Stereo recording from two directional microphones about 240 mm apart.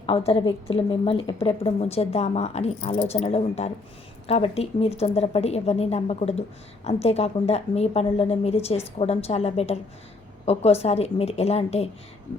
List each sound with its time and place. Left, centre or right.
0.0 s a woman's voice: left